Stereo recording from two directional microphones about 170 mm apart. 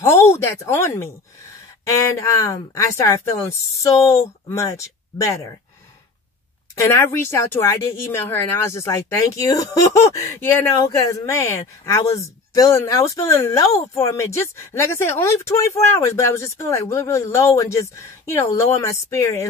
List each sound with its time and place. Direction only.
0.0 s speech: 15° left (ahead or behind)
6.8 s speech: 15° left (ahead or behind)